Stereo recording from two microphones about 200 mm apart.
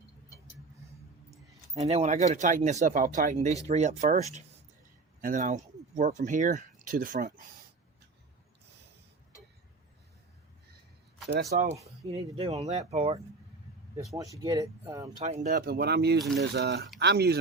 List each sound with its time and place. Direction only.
1.8 s speech: 30° right (ahead or behind)
11.4 s speech: 35° right (ahead or behind)
14.2 s speech: 15° right (ahead or behind)
15.2 s speech: 35° right (ahead or behind)
15.5 s speech: 55° right (ahead or behind)